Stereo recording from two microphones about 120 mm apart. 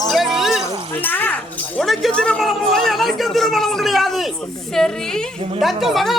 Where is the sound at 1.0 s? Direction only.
15° left (ahead or behind).